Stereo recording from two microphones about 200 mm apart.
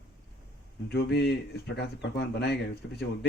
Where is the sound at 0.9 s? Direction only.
55° left (ahead or behind).